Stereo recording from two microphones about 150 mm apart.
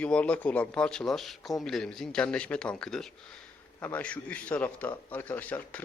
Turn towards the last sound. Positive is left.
turn(degrees=10)  # may be behind; listen again after turning